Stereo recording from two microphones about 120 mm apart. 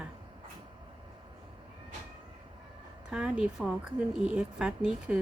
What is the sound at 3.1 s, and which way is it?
A woman's voice, 5° right (ahead or behind).